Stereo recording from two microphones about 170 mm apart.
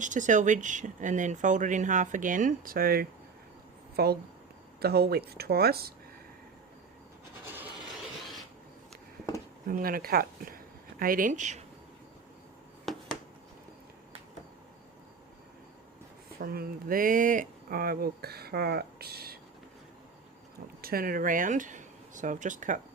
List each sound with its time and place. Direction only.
0.0 s speech: 45° right (ahead or behind); by 5.9 s 65° right (ahead or behind)
9.6 s speech: 55° right (ahead or behind)
12.8 s a sound: centre (ahead or behind)
16.4 s speech: 60° right (ahead or behind)
20.8 s speech: 60° right (ahead or behind)